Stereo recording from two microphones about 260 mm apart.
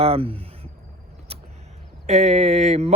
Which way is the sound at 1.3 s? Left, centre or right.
Right.